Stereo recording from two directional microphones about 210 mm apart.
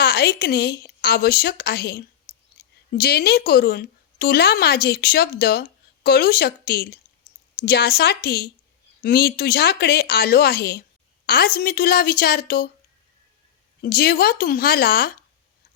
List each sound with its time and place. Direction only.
0.0 s speech: 50° left (ahead or behind)
13.8 s speech: 45° left (ahead or behind)